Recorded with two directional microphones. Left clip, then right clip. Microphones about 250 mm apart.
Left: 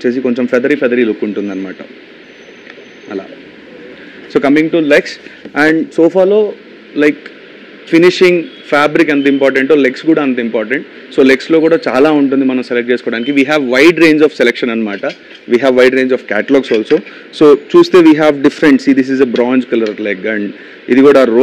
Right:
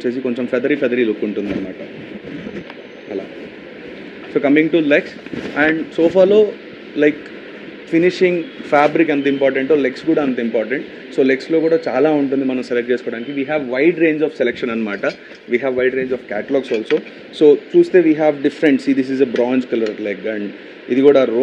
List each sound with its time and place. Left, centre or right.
0.0 s a man's voice: left
4.3 s a man's voice: left
4.6 s a man's voice: left
5.0 s a man's voice: left
6.1 s a man's voice: centre
7.9 s a man's voice: left
13.0 s a man's voice: left
15.0 s speech: centre
15.5 s a man's voice: left